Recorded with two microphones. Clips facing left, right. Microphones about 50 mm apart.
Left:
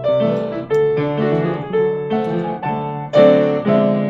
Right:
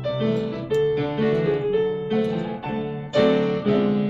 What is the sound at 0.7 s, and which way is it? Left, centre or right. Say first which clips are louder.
Music: left 6 dB; left.